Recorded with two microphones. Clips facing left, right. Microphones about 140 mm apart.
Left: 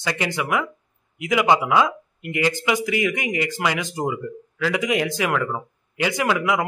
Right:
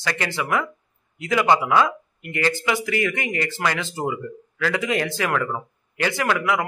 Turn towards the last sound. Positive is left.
turn(degrees=20)  # may be behind; listen again after turning